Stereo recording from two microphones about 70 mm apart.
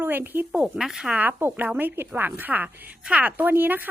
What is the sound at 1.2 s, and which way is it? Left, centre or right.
A woman's voice, right.